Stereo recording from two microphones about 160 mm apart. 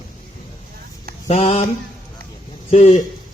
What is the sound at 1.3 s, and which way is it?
Mantra, 40° left (ahead or behind).